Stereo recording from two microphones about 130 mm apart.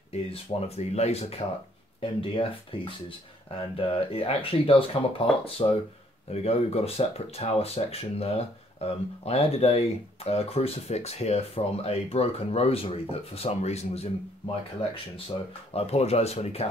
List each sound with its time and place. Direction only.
0.6 s speech: 55° left (ahead or behind)
2.0 s speech: 45° left (ahead or behind)
14.5 s speech: 45° left (ahead or behind)